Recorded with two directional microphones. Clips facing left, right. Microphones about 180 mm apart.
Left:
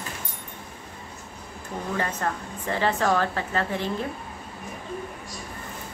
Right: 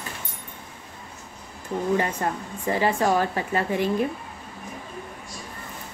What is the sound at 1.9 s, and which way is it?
A woman's voice, 15° right (ahead or behind).